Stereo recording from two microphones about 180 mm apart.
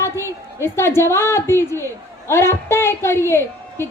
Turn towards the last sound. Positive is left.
turn(degrees=15)  # may be behind; listen again after turning